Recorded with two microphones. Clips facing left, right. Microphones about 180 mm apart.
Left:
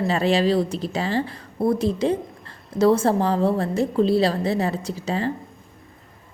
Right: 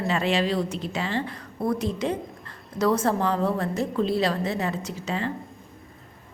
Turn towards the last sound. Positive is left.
turn(degrees=35)  # may be behind; listen again after turning